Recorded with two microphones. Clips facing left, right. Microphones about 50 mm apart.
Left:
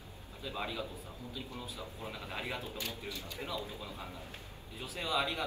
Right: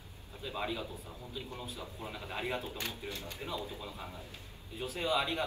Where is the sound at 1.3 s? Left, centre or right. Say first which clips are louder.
Right 2 dB; right.